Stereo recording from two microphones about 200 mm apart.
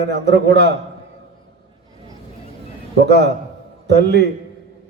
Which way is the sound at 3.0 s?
55° right (ahead or behind).